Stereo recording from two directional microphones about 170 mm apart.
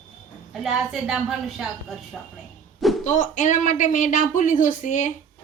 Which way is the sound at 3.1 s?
50° left (ahead or behind).